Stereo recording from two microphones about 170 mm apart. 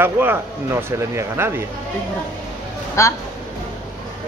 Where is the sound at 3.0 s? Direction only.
15° left (ahead or behind).